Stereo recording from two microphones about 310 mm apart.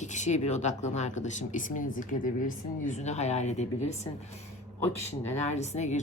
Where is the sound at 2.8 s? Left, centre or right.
Left.